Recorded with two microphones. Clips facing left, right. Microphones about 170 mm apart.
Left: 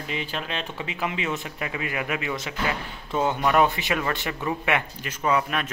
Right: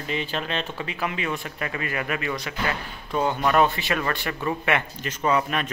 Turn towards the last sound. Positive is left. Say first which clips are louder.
# right 1 dB
turn(degrees=0)  # may be behind; listen again after turning